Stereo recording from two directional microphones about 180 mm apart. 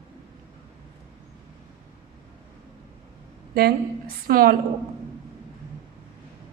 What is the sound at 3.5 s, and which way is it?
A woman's voice, 60° right (ahead or behind).